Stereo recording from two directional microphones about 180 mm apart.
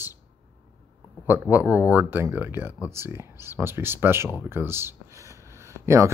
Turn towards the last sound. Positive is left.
turn(degrees=-15)  # may be behind; listen again after turning